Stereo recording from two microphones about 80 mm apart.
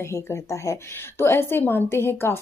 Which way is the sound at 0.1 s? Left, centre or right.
Left.